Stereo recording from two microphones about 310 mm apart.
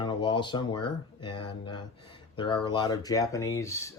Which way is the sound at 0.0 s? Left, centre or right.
Centre.